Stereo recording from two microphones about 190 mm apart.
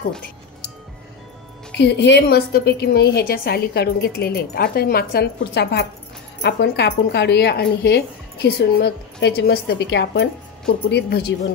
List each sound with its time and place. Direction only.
1.8 s speech: 65° left (ahead or behind)